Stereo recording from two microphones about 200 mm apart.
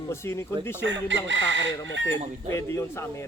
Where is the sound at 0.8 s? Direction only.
65° right (ahead or behind).